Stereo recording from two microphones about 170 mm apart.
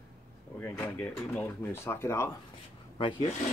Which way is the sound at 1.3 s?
10° left (ahead or behind).